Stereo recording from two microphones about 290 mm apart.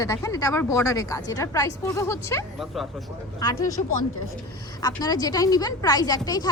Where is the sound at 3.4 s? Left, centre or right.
Centre.